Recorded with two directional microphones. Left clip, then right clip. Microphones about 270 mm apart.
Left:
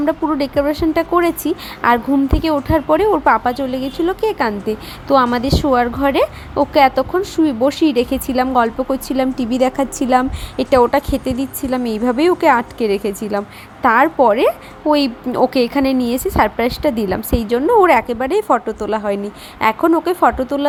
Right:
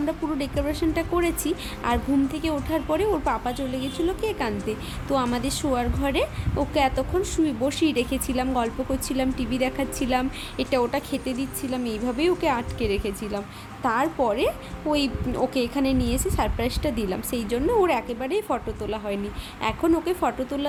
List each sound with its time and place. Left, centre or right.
0.0 s speech: centre